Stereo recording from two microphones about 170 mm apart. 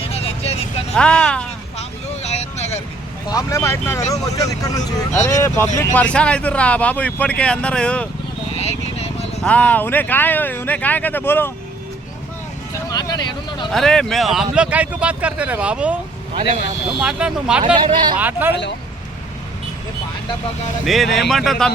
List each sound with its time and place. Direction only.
0.1 s vehicle: 35° left (ahead or behind)
0.9 s speech: 5° left (ahead or behind)
2.2 s vehicle: 40° left (ahead or behind)
3.2 s speech: 20° left (ahead or behind)
8.5 s a sound: 40° left (ahead or behind)
9.4 s speech: 10° left (ahead or behind)
12.9 s speech: 20° left (ahead or behind)
13.7 s speech: centre (ahead or behind)
17.0 s speech: 5° right (ahead or behind)
17.8 s speech: 30° right (ahead or behind)
18.2 s speech: 10° right (ahead or behind)
20.8 s speech: centre (ahead or behind)